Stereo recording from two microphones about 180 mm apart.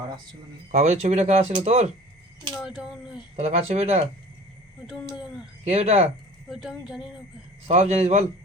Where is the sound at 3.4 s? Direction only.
40° right (ahead or behind).